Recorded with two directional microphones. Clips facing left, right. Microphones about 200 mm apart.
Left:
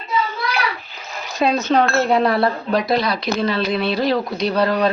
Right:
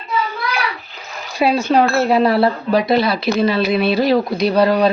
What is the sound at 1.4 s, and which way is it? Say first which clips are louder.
Speech: right 2 dB; 10° right (ahead or behind).